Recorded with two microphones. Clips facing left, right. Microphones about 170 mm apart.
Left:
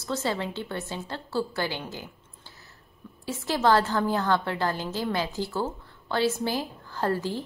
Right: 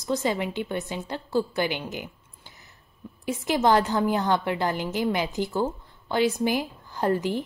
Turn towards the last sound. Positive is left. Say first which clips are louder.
# right 3 dB
turn(degrees=-20)  # may be behind; listen again after turning